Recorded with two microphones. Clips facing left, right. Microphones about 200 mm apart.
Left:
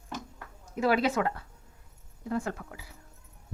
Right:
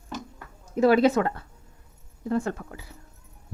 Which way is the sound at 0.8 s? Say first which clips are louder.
Right 7 dB; 45° right (ahead or behind).